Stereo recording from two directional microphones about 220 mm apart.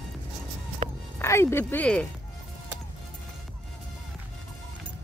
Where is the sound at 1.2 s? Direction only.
10° left (ahead or behind).